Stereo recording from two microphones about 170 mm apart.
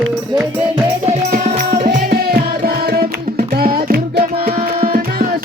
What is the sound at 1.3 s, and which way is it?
Music, 55° right (ahead or behind).